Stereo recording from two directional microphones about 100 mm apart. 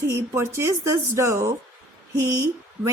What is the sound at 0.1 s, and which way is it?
Speech, 25° right (ahead or behind).